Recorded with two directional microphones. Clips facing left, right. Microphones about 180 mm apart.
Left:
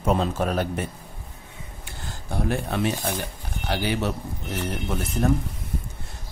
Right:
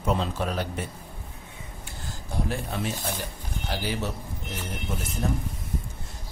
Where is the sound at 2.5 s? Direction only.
65° left (ahead or behind).